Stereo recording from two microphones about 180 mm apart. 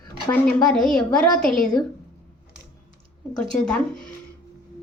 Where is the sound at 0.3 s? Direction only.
5° left (ahead or behind).